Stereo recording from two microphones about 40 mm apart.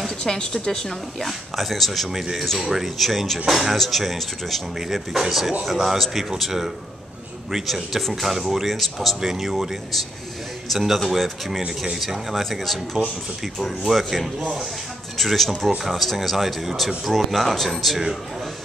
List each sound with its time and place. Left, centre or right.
0.2 s a woman's voice: centre
3.0 s speech: centre
10.7 s speech: centre
11.8 s speech: centre
12.4 s speech: centre